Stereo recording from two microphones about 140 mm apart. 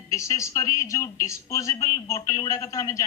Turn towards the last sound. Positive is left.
turn(degrees=25)  # may be behind; listen again after turning